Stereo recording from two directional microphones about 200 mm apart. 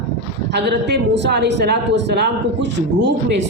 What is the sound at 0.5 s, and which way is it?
Speech, 60° right (ahead or behind).